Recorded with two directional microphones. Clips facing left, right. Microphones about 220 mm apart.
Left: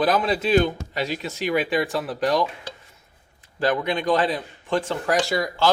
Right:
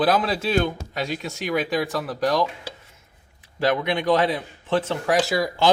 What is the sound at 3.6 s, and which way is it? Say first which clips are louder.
Speech: right 1 dB; 10° right (ahead or behind).